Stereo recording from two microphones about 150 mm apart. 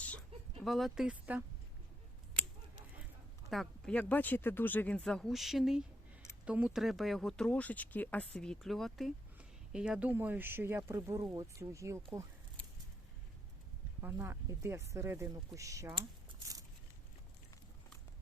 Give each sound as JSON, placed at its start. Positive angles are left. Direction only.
{"t": 0.0, "sound": "a sound", "side_deg": 5}
{"t": 3.5, "sound": "speech", "side_deg": 5}
{"t": 14.0, "sound": "speech", "side_deg": -15}